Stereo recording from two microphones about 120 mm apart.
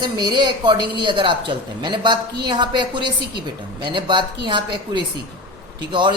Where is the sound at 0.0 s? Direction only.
35° right (ahead or behind).